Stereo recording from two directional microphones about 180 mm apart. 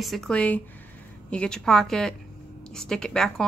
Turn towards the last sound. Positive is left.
turn(degrees=5)  # may be behind; listen again after turning